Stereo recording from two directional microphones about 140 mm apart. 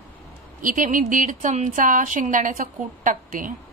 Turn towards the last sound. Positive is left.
turn(degrees=-70)  # may be behind; listen again after turning